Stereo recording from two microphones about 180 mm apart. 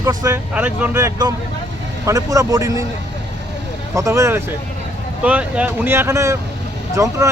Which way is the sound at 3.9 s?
15° right (ahead or behind).